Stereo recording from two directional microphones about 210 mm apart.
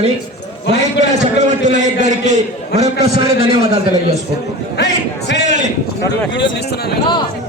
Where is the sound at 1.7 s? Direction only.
35° right (ahead or behind).